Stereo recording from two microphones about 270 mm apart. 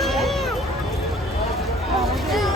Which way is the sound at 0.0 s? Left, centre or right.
Centre.